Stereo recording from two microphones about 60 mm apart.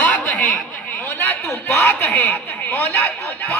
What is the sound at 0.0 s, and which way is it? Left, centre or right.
Snicker, left.